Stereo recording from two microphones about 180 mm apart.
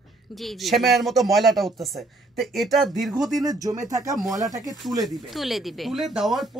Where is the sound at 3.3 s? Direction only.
20° right (ahead or behind).